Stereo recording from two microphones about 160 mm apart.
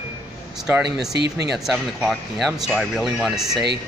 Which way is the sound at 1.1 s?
90° right.